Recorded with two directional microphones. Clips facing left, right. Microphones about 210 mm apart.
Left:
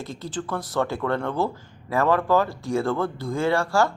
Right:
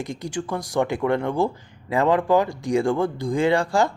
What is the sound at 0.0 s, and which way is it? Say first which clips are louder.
Speech: right 3 dB; 15° right (ahead or behind).